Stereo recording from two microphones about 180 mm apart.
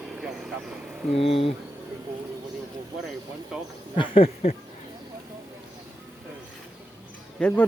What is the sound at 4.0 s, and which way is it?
Speech, 30° left (ahead or behind).